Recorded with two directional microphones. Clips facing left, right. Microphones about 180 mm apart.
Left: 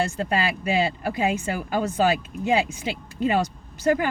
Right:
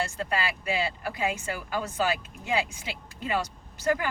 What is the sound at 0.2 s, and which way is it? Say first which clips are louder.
Speech: left 5 dB; 20° left (ahead or behind).